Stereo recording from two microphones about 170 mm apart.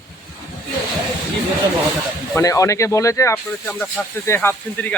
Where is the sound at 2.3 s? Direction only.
20° left (ahead or behind).